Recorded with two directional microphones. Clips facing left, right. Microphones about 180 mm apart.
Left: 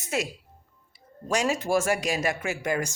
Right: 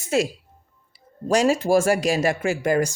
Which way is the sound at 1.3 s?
35° right (ahead or behind).